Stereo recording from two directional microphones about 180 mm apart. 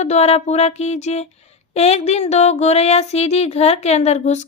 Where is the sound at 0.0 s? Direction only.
40° left (ahead or behind).